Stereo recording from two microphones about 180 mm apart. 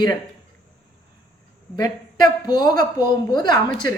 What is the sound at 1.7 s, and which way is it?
Speech, 20° left (ahead or behind).